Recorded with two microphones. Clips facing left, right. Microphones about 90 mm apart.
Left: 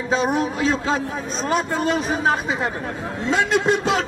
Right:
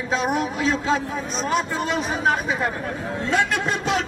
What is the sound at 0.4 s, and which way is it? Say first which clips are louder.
Speech: left 2 dB; 35° left (ahead or behind).